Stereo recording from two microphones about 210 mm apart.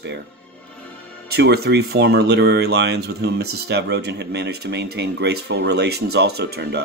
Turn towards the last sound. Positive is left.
turn(degrees=-50)  # may be behind; listen again after turning